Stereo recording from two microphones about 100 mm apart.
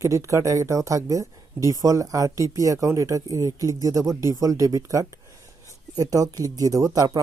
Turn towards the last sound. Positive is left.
turn(degrees=-40)  # may be behind; listen again after turning